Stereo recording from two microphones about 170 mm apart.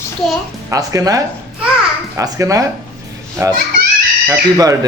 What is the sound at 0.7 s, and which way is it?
A man's voice, 20° right (ahead or behind).